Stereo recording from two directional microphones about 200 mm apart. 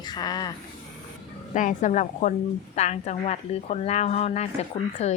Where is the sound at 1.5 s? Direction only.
40° left (ahead or behind).